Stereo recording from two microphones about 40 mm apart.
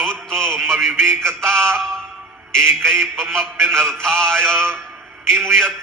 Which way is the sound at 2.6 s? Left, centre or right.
Right.